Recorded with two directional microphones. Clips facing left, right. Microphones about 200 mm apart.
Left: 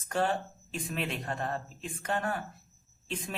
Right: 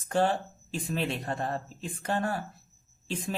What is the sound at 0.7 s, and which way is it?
Speech, 30° right (ahead or behind).